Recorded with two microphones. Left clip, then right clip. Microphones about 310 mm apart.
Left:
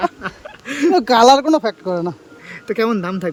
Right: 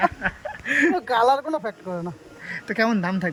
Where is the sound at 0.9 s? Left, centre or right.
Left.